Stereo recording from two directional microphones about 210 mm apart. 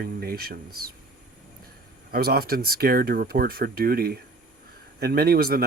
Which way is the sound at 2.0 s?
45° right (ahead or behind).